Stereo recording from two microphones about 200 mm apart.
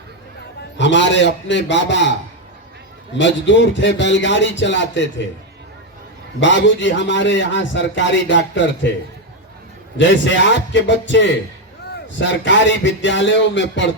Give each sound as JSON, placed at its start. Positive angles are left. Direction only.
{"t": 0.8, "sound": "a man's voice", "side_deg": 65}
{"t": 3.2, "sound": "a man's voice", "side_deg": 65}
{"t": 6.4, "sound": "a man's voice", "side_deg": 65}
{"t": 10.0, "sound": "a man's voice", "side_deg": 65}